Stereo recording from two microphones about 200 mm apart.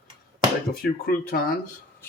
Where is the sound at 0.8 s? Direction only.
50° left (ahead or behind).